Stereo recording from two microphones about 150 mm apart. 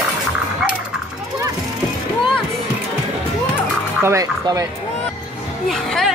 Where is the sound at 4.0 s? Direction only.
15° right (ahead or behind).